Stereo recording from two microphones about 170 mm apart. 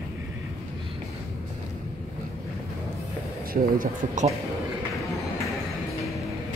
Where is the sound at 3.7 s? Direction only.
50° right (ahead or behind).